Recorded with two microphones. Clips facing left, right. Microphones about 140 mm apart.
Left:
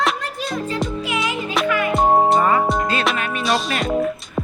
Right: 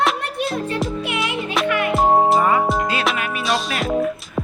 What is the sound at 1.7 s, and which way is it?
Music, 65° right (ahead or behind).